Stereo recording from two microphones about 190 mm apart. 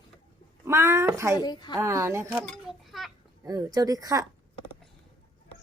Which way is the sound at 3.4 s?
20° right (ahead or behind).